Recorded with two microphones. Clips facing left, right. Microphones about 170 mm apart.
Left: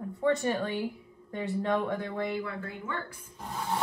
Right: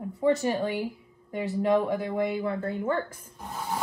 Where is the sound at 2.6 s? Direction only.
40° right (ahead or behind).